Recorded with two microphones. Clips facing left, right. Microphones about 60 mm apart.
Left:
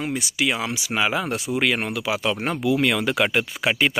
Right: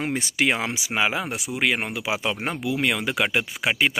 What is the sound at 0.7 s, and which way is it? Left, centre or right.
Speech, centre.